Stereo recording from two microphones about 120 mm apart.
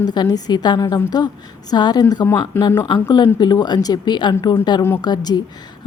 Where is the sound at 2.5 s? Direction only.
15° left (ahead or behind).